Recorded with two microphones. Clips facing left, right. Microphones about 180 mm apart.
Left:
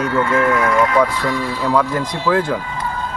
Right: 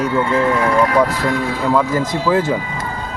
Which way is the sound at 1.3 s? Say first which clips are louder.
Right 2 dB; 50° right (ahead or behind).